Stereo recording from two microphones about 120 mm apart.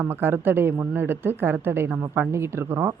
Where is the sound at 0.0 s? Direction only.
15° right (ahead or behind).